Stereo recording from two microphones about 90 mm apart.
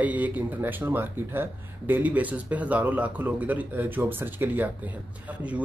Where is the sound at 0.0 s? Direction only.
20° right (ahead or behind).